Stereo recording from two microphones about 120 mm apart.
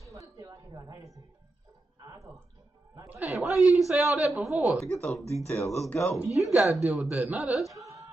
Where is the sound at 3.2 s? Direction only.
Centre (ahead or behind).